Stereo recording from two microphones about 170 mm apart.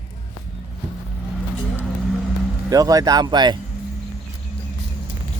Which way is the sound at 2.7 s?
20° right (ahead or behind).